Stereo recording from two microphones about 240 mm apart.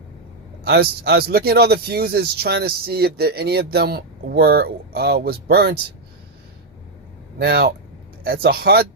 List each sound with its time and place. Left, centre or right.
0.6 s speech: right
7.3 s speech: right